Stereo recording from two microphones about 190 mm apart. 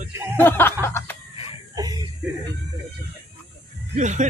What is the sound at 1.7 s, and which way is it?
Music, 20° right (ahead or behind).